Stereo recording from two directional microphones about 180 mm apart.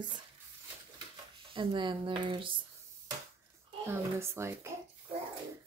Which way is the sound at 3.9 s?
15° right (ahead or behind).